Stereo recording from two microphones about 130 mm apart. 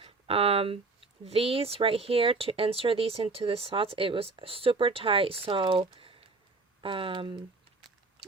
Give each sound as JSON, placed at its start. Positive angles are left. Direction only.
{"t": 0.0, "sound": "speech", "side_deg": -50}